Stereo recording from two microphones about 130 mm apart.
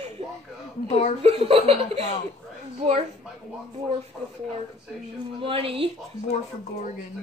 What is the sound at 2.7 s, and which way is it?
Speech, 60° right (ahead or behind).